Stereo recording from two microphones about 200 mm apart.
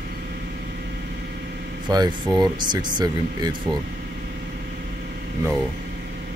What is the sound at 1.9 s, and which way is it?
Speech, 20° right (ahead or behind).